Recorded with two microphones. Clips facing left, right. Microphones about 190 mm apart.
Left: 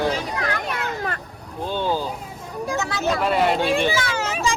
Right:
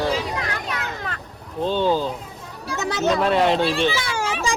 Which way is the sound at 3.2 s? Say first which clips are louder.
Even; 5° left (ahead or behind).